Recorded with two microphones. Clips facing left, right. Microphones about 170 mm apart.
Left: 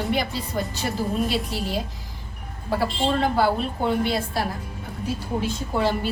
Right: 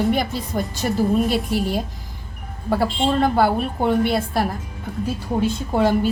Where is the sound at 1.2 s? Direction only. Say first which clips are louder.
Right 5 dB; 50° right (ahead or behind).